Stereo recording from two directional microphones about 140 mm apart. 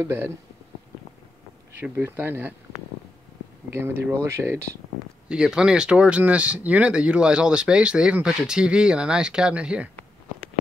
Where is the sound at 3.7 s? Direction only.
15° right (ahead or behind).